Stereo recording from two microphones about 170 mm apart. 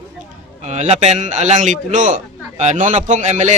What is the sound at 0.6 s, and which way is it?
A man's voice, 40° right (ahead or behind).